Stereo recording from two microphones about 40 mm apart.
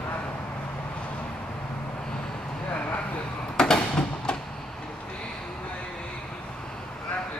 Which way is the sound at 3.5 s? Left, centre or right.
Centre.